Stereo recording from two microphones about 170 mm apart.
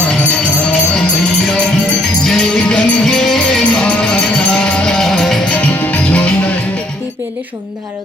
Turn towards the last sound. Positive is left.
turn(degrees=5)  # may be behind; listen again after turning